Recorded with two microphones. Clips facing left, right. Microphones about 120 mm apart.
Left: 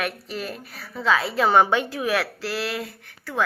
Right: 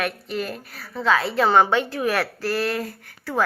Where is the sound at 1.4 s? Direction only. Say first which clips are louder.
Even; 10° left (ahead or behind).